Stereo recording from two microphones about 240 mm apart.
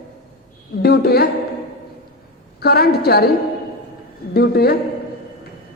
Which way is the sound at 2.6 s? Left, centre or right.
Left.